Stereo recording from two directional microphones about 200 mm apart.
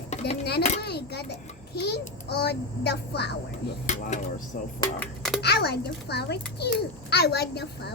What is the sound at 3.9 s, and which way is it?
Speech, 35° left (ahead or behind).